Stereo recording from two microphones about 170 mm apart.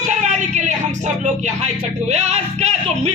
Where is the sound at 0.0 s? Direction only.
45° right (ahead or behind).